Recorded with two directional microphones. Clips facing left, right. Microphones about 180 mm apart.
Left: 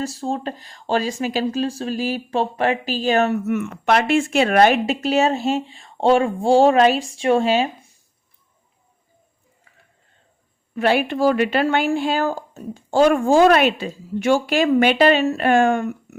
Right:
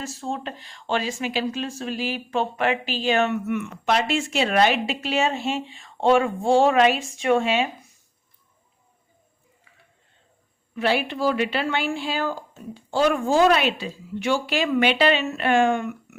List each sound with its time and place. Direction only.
0.0 s speech: 35° left (ahead or behind)
10.8 s speech: 50° left (ahead or behind)